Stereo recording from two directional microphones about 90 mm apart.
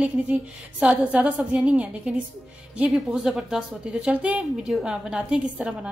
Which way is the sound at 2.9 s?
Centre (ahead or behind).